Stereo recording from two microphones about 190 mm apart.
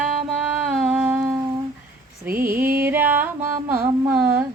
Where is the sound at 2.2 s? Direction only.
10° right (ahead or behind).